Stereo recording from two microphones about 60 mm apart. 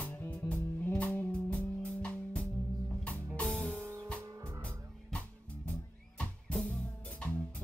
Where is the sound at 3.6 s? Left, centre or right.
Centre.